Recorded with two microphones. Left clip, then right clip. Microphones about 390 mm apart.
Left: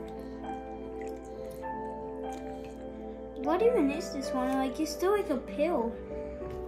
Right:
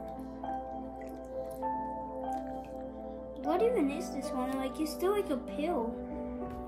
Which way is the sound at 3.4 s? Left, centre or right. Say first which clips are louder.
Left 3 dB; centre.